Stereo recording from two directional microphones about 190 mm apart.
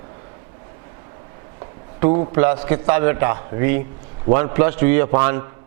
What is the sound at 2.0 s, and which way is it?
A man's voice, 20° right (ahead or behind).